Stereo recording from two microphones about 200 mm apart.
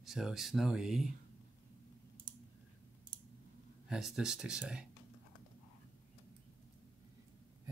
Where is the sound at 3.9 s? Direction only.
5° right (ahead or behind).